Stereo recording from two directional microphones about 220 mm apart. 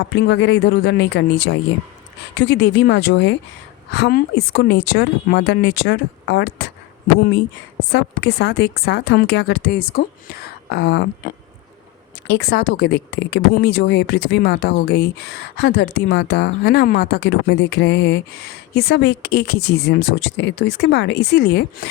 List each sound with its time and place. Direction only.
0.0 s speech: 55° left (ahead or behind)
7.9 s speech: 50° left (ahead or behind)
12.3 s speech: 50° left (ahead or behind)